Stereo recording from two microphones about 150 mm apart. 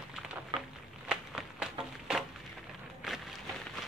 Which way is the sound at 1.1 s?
5° right (ahead or behind).